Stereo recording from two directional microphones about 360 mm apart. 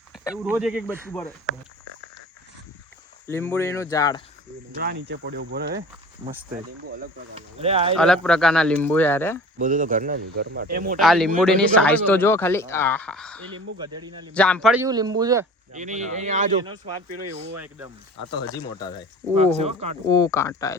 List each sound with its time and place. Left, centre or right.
0.1 s speech: centre
3.2 s speech: centre
4.8 s speech: right
7.9 s speech: centre
9.6 s speech: right
11.0 s speech: centre
13.7 s speech: centre
14.3 s speech: centre
16.7 s speech: right
17.6 s speech: centre
18.3 s speech: centre
19.4 s speech: centre
20.1 s speech: centre